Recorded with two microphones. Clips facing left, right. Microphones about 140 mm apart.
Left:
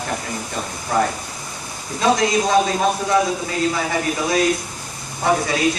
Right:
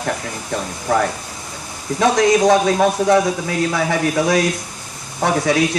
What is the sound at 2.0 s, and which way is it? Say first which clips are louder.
A man's voice: right 4 dB; 70° right (ahead or behind).